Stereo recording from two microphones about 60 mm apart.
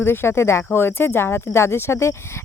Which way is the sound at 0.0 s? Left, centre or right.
Left.